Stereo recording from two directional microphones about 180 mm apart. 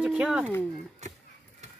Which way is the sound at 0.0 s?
5° right (ahead or behind).